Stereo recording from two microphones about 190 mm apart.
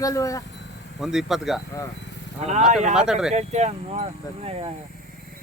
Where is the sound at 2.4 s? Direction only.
35° right (ahead or behind).